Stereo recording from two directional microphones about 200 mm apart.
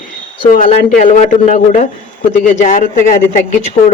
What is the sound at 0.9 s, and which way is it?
Speech, 40° left (ahead or behind).